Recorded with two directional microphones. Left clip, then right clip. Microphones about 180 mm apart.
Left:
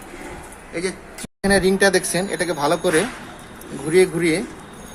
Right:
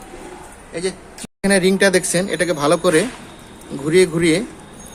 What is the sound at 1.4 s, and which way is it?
Speech, 45° right (ahead or behind).